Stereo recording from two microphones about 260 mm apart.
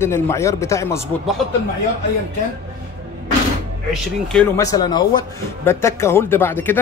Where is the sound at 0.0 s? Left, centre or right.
Centre.